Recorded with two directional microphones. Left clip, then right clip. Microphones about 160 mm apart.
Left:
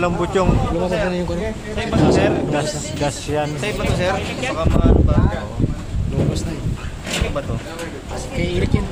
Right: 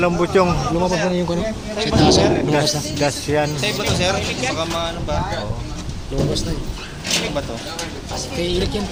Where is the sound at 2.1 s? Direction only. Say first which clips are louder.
Right 1 dB; 15° right (ahead or behind).